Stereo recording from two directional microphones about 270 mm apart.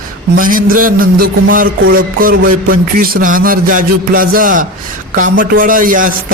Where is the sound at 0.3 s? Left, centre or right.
Right.